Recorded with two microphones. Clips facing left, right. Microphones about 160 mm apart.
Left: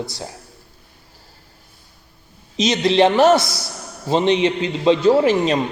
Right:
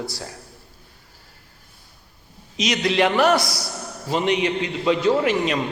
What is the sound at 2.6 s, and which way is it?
A man's voice, 25° left (ahead or behind).